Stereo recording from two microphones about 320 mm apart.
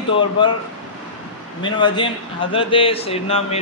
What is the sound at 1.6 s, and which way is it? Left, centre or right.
A man's voice, centre.